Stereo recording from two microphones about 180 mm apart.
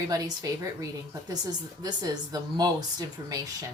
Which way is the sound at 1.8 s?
20° right (ahead or behind).